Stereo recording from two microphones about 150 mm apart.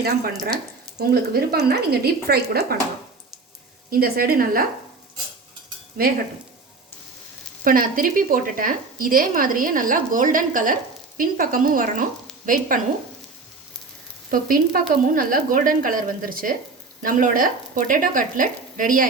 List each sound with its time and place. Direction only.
0.9 s speech: 90° right
3.8 s speech: 75° right (ahead or behind)
6.0 s speech: 75° right (ahead or behind)
7.6 s speech: 70° right (ahead or behind)
14.3 s speech: 70° right (ahead or behind)